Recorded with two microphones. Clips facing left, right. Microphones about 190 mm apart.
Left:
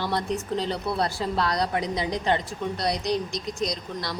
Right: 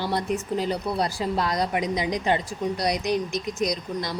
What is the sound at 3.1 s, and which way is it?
Speech, 20° left (ahead or behind).